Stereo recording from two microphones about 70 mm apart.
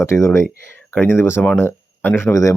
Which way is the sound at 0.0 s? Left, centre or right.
Left.